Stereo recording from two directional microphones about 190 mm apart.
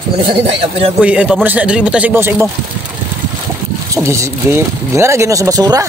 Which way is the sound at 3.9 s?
15° right (ahead or behind).